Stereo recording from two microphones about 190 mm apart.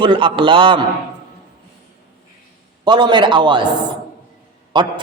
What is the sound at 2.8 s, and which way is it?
Speech, 25° right (ahead or behind).